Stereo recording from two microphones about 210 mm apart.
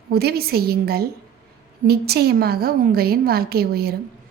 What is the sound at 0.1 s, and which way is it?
A woman's voice, 50° right (ahead or behind).